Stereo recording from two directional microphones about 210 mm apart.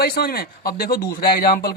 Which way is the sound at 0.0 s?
45° left (ahead or behind).